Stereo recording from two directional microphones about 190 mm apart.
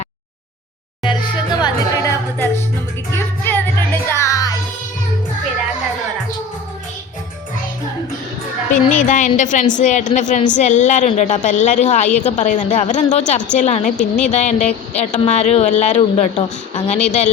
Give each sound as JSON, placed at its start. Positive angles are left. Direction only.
{"t": 1.0, "sound": "music", "side_deg": 20}
{"t": 3.1, "sound": "music", "side_deg": 10}
{"t": 8.7, "sound": "a woman's voice", "side_deg": 40}